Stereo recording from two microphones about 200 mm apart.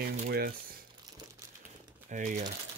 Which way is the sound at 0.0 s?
50° right (ahead or behind).